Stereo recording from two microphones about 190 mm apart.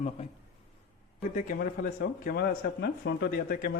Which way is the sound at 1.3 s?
45° left (ahead or behind).